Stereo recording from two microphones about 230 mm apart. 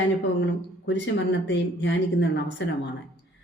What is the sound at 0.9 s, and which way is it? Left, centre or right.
A woman's voice, left.